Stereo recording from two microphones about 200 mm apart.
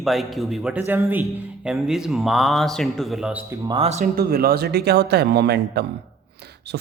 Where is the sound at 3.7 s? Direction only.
30° right (ahead or behind).